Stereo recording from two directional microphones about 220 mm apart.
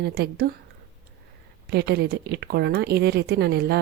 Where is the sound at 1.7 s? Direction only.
45° right (ahead or behind).